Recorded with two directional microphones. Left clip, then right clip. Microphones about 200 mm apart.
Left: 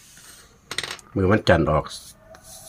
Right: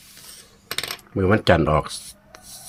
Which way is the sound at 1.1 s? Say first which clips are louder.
Right 1 dB; centre (ahead or behind).